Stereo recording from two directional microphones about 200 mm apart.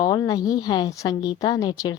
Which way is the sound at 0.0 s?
20° left (ahead or behind).